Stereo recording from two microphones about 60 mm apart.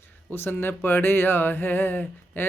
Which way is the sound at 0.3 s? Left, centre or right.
Left.